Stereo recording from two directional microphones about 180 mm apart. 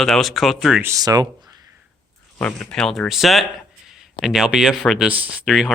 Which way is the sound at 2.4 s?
5° left (ahead or behind).